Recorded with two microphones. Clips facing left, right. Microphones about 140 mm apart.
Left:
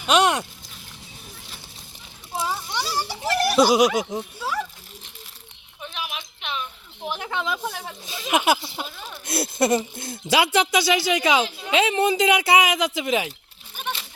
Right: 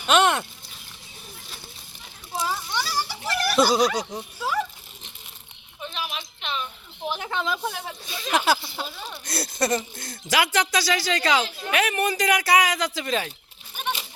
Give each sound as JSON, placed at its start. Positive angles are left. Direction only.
{"t": 0.0, "sound": "speech", "side_deg": 10}
{"t": 2.8, "sound": "a child's voice", "side_deg": 35}
{"t": 3.5, "sound": "speech", "side_deg": 15}
{"t": 4.4, "sound": "a sound", "side_deg": -10}
{"t": 5.8, "sound": "a sound", "side_deg": 5}
{"t": 7.3, "sound": "speech", "side_deg": 10}
{"t": 8.3, "sound": "speech", "side_deg": 20}